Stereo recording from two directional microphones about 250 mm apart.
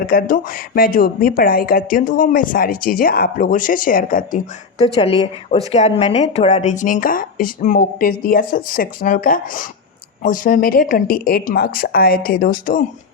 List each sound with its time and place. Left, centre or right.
0.1 s a woman's voice: left